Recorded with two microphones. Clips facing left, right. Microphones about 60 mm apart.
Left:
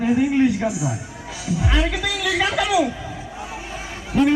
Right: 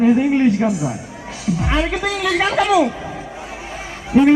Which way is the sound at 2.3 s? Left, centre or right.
Centre.